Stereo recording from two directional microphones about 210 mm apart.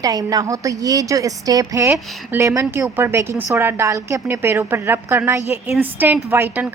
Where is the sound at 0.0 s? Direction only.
20° right (ahead or behind).